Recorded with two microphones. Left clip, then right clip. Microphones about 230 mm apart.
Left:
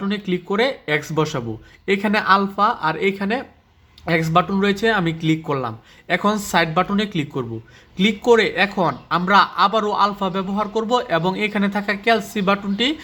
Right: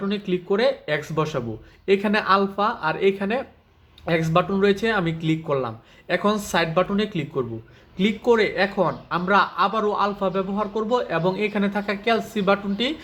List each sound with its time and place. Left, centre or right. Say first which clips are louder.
0.0 s speech: left 1 dB; left